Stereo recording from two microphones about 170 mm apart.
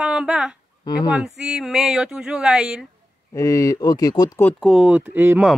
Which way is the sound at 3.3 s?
15° left (ahead or behind).